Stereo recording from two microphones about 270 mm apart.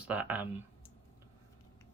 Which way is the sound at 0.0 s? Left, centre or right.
Centre.